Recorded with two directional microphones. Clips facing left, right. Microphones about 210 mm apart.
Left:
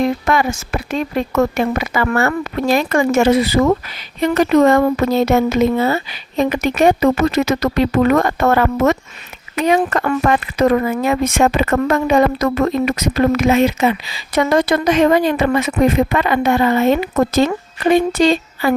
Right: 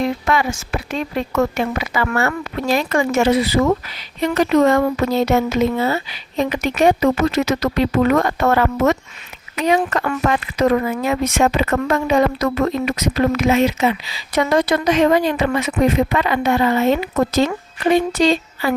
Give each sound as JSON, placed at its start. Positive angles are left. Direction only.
{"t": 0.0, "sound": "speech", "side_deg": 50}